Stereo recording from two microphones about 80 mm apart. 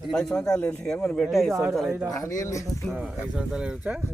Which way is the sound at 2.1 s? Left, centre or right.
Left.